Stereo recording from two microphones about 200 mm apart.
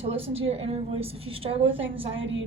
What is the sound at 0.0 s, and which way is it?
A woman's voice, 30° right (ahead or behind).